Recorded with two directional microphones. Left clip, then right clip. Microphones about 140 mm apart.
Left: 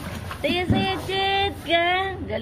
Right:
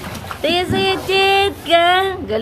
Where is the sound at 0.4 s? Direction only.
55° right (ahead or behind).